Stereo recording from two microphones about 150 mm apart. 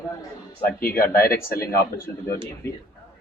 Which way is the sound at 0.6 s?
80° left.